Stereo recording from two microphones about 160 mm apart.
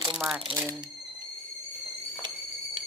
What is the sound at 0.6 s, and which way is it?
Speech, 15° right (ahead or behind).